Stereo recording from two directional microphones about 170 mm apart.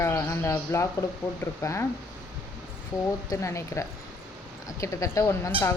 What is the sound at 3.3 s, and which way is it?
Speech, 15° left (ahead or behind).